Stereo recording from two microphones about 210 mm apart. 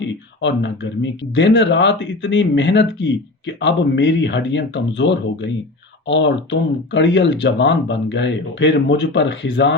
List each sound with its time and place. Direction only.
0.0 s speech: 60° left (ahead or behind)